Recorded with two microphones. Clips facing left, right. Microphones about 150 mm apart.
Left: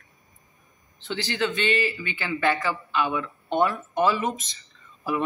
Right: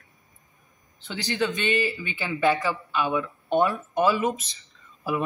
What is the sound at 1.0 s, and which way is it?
Speech, 15° right (ahead or behind).